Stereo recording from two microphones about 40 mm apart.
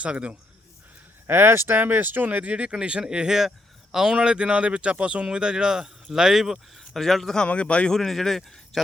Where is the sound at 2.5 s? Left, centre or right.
Right; by 7.3 s centre.